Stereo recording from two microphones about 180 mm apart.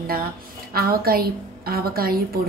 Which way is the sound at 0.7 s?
55° right (ahead or behind).